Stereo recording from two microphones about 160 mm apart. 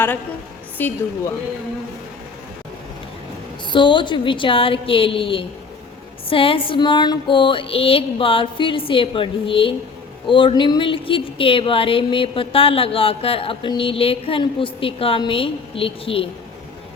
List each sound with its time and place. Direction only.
0.8 s a woman's voice: 10° left (ahead or behind)
3.7 s speech: 30° left (ahead or behind)